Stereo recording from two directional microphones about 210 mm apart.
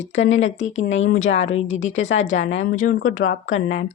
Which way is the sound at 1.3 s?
65° left (ahead or behind).